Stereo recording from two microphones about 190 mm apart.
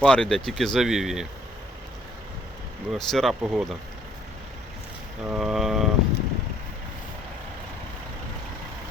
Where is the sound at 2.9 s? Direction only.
Centre (ahead or behind).